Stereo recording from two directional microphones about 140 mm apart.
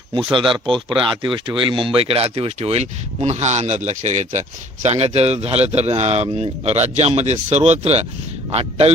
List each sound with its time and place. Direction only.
0.3 s speech: 35° right (ahead or behind)